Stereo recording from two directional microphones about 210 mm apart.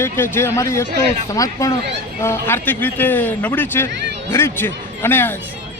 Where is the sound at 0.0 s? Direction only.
10° left (ahead or behind).